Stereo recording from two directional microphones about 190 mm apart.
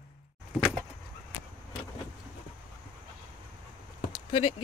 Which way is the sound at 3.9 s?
30° left (ahead or behind).